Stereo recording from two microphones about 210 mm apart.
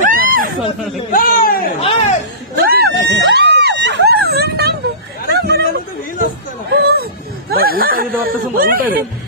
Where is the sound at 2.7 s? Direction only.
50° right (ahead or behind).